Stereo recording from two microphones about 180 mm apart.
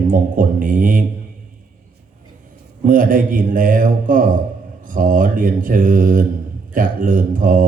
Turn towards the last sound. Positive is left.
turn(degrees=-50)  # may be behind; listen again after turning